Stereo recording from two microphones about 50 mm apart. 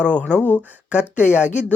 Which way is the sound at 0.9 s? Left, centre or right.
Right.